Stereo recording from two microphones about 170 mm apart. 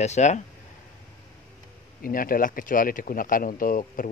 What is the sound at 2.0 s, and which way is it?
Speech, 55° left (ahead or behind).